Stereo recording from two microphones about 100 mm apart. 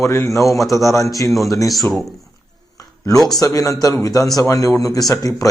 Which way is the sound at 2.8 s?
35° left (ahead or behind).